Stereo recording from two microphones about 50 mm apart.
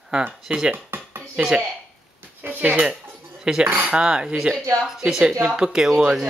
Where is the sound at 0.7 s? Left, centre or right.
Right.